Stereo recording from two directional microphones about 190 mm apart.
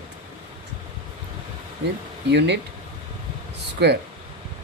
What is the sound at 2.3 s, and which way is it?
Speech, 65° right (ahead or behind).